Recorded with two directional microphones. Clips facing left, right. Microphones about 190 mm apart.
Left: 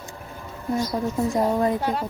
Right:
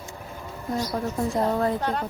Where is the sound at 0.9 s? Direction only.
10° left (ahead or behind).